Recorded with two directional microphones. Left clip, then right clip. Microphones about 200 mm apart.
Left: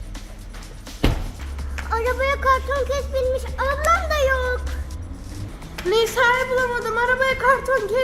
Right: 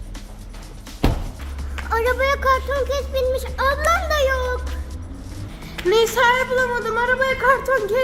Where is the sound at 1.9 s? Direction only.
15° right (ahead or behind).